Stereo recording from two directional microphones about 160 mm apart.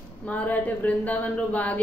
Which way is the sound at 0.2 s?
10° left (ahead or behind).